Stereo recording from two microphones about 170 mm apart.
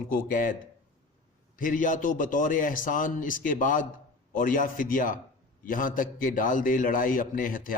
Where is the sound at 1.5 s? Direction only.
50° left (ahead or behind).